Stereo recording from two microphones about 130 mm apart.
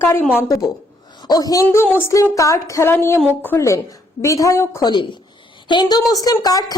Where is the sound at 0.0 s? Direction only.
15° left (ahead or behind).